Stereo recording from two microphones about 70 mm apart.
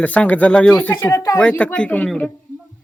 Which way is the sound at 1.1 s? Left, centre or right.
Left.